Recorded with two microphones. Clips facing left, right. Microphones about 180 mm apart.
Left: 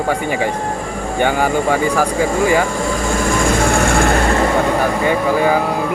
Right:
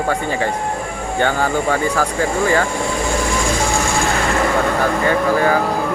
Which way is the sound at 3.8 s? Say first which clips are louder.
Left 4 dB; 60° left (ahead or behind).